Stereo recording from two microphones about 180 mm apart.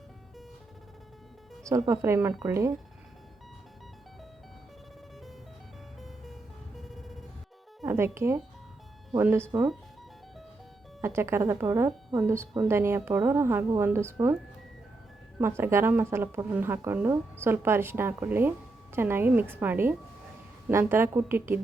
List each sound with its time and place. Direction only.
1.9 s speech: 15° right (ahead or behind)
6.7 s a sound: centre (ahead or behind)
7.9 s speech: 15° right (ahead or behind)
11.0 s speech: 15° right (ahead or behind)
11.9 s speech: centre (ahead or behind)
12.3 s speech: 15° right (ahead or behind)
15.4 s speech: 15° right (ahead or behind)